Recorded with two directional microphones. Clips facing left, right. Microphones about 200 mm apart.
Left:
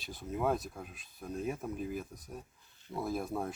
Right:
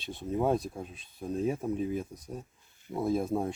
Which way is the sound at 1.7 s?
Centre (ahead or behind).